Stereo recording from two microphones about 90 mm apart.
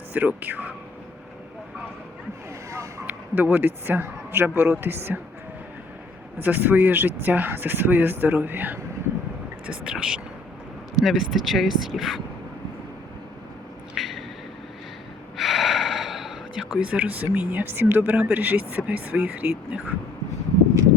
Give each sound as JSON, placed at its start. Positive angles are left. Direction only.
{"t": 0.1, "sound": "a man's voice", "side_deg": -20}
{"t": 3.1, "sound": "a man's voice", "side_deg": -20}
{"t": 6.4, "sound": "a man's voice", "side_deg": -20}
{"t": 9.6, "sound": "speech", "side_deg": -10}
{"t": 13.9, "sound": "a sound", "side_deg": 0}
{"t": 15.4, "sound": "gasp", "side_deg": 0}
{"t": 16.7, "sound": "speech", "side_deg": -15}